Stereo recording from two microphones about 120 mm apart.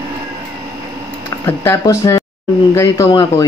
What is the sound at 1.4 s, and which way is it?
Speech, 20° left (ahead or behind).